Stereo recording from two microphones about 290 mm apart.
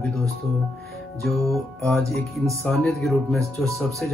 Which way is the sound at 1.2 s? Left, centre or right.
Centre.